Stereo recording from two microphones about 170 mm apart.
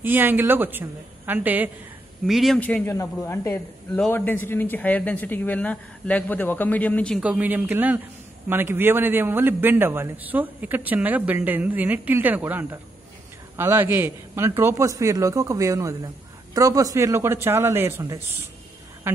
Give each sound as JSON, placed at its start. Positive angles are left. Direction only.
{"t": 0.0, "sound": "a man's voice", "side_deg": -10}
{"t": 7.2, "sound": "a man's voice", "side_deg": -5}